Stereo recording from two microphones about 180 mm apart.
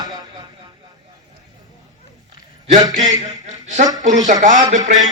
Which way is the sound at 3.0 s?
20° right (ahead or behind).